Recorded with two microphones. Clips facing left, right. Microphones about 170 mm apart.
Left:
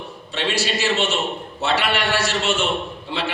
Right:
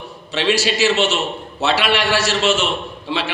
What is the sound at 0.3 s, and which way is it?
A man's voice, 90° right.